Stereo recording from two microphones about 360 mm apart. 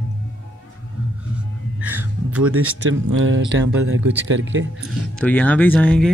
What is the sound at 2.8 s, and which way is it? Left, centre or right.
Speech, right.